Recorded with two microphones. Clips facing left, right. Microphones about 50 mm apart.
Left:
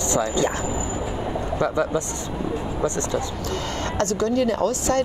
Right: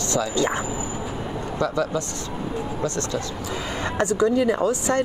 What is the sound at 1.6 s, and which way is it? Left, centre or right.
Speech, left.